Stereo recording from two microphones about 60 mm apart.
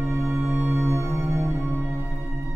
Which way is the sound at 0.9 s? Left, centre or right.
Right.